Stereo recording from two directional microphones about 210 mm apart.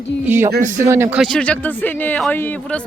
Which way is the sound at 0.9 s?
10° right (ahead or behind).